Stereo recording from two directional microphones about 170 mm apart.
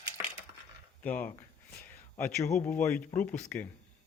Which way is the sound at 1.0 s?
10° left (ahead or behind).